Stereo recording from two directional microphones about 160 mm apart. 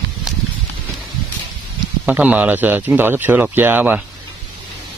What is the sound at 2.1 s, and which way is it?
Speech, 10° right (ahead or behind).